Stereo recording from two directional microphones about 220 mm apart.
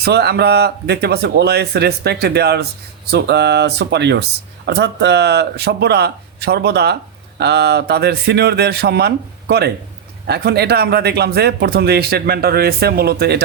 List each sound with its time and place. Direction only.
0.0 s speech: 45° right (ahead or behind)